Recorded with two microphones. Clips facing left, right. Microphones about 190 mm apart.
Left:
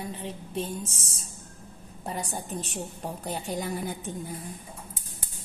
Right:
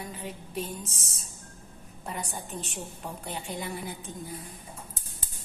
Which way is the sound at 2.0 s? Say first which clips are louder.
Left 3 dB; 35° left (ahead or behind).